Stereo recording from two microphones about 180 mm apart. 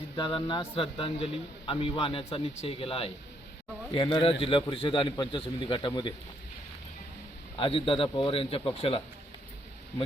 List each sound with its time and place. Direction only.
0.2 s a man's voice: 25° left (ahead or behind)
7.5 s a man's voice: 30° left (ahead or behind)